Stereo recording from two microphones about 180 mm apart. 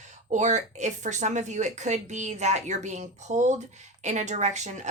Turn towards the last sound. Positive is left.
turn(degrees=-40)  # may be behind; listen again after turning